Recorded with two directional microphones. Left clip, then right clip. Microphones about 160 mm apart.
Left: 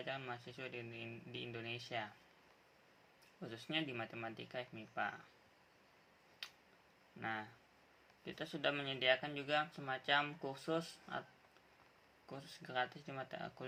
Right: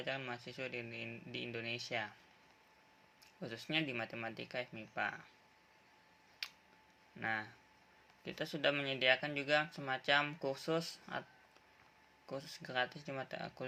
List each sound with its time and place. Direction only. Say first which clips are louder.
0.0 s speech: right 3 dB; 35° right (ahead or behind)
3.4 s speech: right 4 dB; 35° right (ahead or behind)
6.4 s a sound: right 5 dB; 35° right (ahead or behind)
7.2 s speech: right 5 dB; 35° right (ahead or behind)
12.2 s speech: right 6 dB; 35° right (ahead or behind)